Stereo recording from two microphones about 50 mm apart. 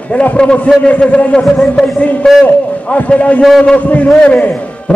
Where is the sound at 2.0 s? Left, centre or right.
Left.